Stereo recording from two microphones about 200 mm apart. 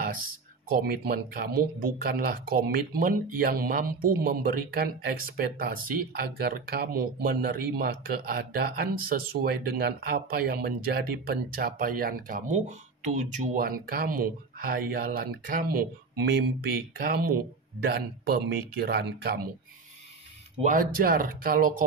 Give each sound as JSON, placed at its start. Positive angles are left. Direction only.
{"t": 0.7, "sound": "speech", "side_deg": -45}
{"t": 20.6, "sound": "speech", "side_deg": -45}